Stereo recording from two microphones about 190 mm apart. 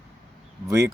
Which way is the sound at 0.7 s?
15° right (ahead or behind).